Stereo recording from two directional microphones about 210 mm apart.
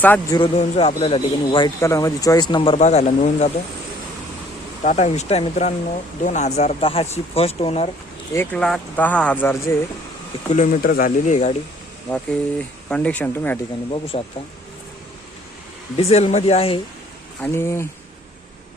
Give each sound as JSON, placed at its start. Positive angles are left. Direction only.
{"t": 0.0, "sound": "speech", "side_deg": 10}
{"t": 0.3, "sound": "a man's voice", "side_deg": 25}
{"t": 4.8, "sound": "a man's voice", "side_deg": 35}
{"t": 8.3, "sound": "speech", "side_deg": 10}
{"t": 10.5, "sound": "speech", "side_deg": 40}
{"t": 12.1, "sound": "speech", "side_deg": 5}
{"t": 13.9, "sound": "a man's voice", "side_deg": 25}
{"t": 16.0, "sound": "a man's voice", "side_deg": 30}
{"t": 17.4, "sound": "speech", "side_deg": 10}